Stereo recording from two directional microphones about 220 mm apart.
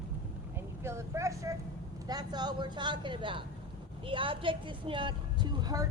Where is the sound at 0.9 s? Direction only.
15° right (ahead or behind).